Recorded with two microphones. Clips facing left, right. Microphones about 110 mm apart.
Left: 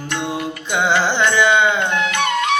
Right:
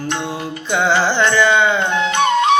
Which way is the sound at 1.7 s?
25° right (ahead or behind).